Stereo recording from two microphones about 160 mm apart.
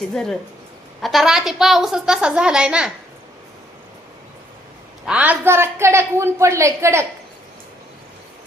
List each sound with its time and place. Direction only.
0.1 s a woman's voice: 5° left (ahead or behind)
5.0 s a woman's voice: 10° right (ahead or behind)